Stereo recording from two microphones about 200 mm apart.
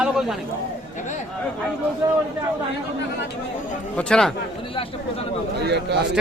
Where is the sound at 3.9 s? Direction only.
5° left (ahead or behind).